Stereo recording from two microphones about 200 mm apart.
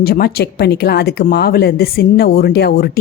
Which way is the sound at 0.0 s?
50° left (ahead or behind).